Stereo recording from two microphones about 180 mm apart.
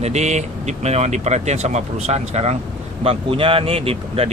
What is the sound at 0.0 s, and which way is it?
Speech, 40° right (ahead or behind).